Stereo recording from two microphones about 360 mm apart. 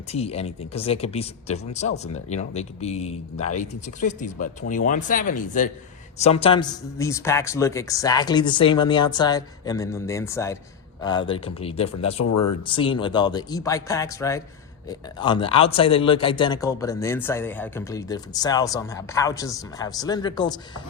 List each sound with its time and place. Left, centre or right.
0.1 s a man's voice: centre
12.2 s speech: left
12.6 s a man's voice: centre